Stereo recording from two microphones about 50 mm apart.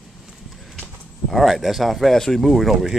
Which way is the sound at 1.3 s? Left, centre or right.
Centre.